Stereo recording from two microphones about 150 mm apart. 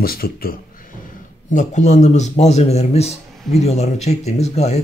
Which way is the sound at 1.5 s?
55° left (ahead or behind).